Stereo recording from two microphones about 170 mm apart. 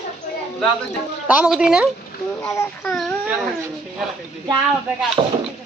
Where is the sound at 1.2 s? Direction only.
5° right (ahead or behind).